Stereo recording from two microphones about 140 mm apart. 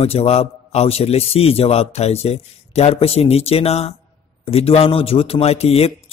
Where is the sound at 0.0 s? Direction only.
45° left (ahead or behind).